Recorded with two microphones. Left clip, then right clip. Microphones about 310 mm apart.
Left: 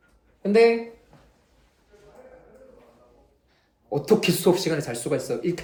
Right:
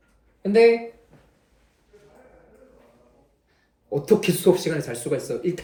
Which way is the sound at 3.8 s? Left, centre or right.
Centre.